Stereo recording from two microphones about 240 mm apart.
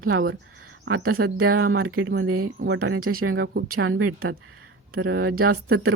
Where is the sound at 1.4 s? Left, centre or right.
Right.